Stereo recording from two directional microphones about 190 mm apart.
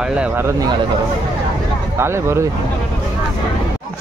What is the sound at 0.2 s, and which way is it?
Speech, 10° right (ahead or behind).